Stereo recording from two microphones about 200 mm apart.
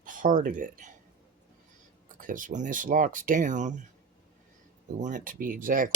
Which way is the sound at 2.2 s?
40° right (ahead or behind).